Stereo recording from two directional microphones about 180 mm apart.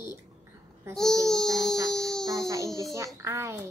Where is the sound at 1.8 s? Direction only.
Centre (ahead or behind).